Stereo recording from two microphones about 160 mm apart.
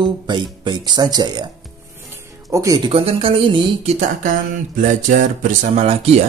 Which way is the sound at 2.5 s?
20° right (ahead or behind).